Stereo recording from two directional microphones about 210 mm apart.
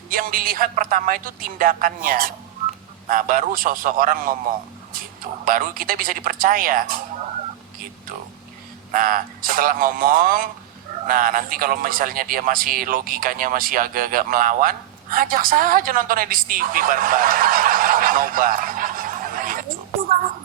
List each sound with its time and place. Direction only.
0.1 s a woman's voice: 40° right (ahead or behind)
5.5 s a woman's voice: 40° right (ahead or behind)
8.9 s a woman's voice: 40° right (ahead or behind)